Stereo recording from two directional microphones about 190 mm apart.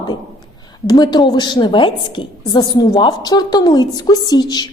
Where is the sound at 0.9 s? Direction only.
20° left (ahead or behind).